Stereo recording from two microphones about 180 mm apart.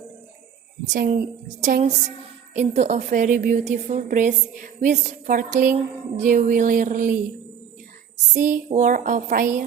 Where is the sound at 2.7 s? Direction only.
40° right (ahead or behind).